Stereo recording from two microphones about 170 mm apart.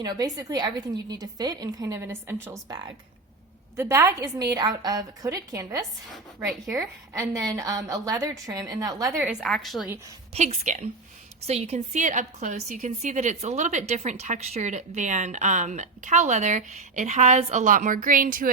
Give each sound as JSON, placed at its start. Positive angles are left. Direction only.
{"t": 0.0, "sound": "a woman's voice", "side_deg": -20}
{"t": 9.4, "sound": "a woman's voice", "side_deg": 0}
{"t": 10.3, "sound": "a woman's voice", "side_deg": -40}